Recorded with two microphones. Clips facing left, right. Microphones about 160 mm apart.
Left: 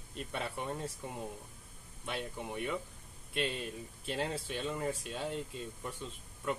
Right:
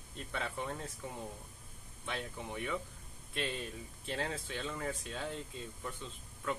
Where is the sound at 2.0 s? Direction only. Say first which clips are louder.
Left 2 dB; 5° left (ahead or behind).